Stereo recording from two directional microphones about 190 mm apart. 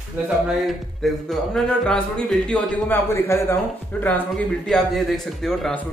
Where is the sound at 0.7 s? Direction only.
Centre (ahead or behind).